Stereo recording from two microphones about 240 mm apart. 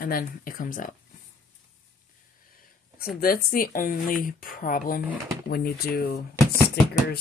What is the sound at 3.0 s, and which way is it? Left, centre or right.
Speech, left.